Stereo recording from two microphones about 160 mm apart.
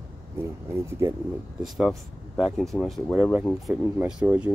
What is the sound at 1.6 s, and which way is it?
Speech, centre (ahead or behind).